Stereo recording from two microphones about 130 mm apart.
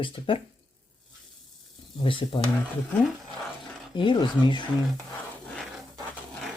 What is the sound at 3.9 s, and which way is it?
Speech, 40° left (ahead or behind).